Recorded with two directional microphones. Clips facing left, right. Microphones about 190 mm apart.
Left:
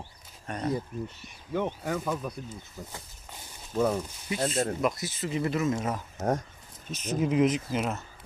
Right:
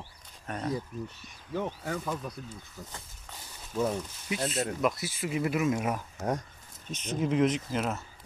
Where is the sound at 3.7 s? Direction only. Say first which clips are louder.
Left 3 dB; 50° left (ahead or behind).